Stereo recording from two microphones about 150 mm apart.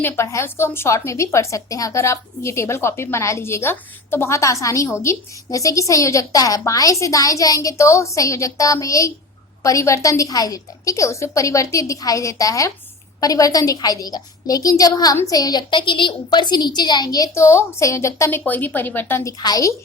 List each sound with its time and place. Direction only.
0.0 s a woman's voice: 20° left (ahead or behind)